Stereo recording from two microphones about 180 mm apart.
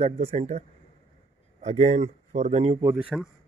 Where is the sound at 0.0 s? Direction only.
35° right (ahead or behind).